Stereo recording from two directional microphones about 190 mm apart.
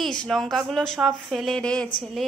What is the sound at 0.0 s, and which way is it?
Speech, 5° left (ahead or behind).